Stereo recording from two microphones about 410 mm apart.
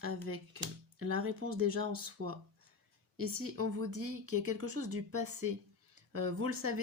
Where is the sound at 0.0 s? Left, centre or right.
Right.